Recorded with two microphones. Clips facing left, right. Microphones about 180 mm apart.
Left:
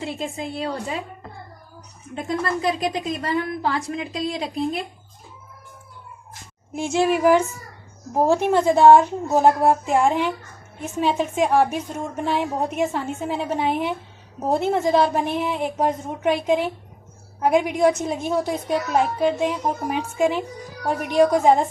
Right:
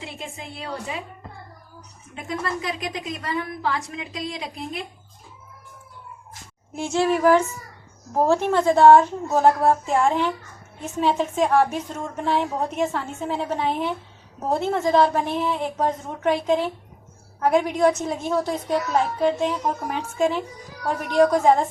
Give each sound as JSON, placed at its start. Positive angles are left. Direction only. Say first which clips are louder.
{"t": 0.0, "sound": "a woman's voice", "louder": "left 8 dB", "side_deg": 35}
{"t": 2.1, "sound": "a woman's voice", "louder": "left 4 dB", "side_deg": 35}
{"t": 6.7, "sound": "a woman's voice", "louder": "left 1 dB", "side_deg": 15}